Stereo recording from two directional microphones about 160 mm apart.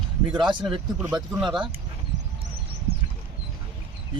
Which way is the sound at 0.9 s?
5° right (ahead or behind).